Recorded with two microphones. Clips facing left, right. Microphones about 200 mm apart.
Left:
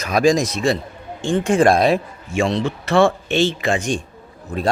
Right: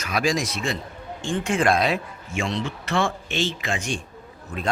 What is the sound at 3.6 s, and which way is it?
Speech, 40° left (ahead or behind).